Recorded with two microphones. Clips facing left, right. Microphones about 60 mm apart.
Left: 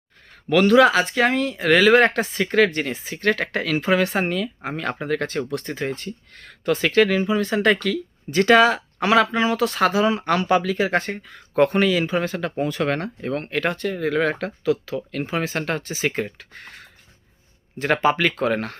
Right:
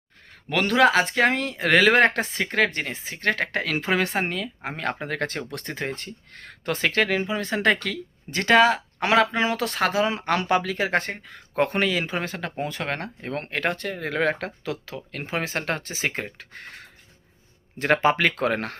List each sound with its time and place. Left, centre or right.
0.7 s speech: right
11.5 s speech: right
17.7 s speech: right